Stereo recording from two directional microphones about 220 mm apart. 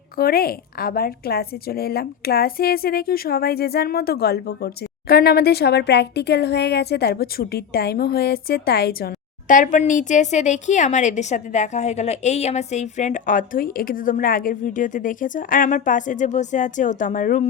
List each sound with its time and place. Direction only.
0.2 s a woman's voice: 45° left (ahead or behind)